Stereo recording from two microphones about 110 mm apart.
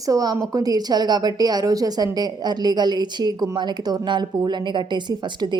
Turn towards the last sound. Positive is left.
turn(degrees=-40)  # may be behind; listen again after turning